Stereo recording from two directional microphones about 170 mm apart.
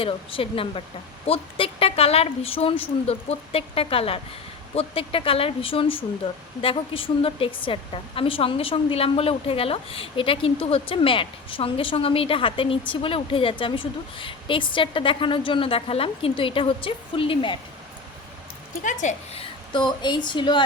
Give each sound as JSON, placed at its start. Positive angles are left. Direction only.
{"t": 0.0, "sound": "a woman's voice", "side_deg": 30}
{"t": 18.8, "sound": "a woman's voice", "side_deg": 45}